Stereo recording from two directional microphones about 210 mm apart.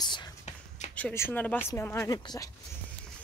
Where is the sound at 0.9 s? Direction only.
10° left (ahead or behind).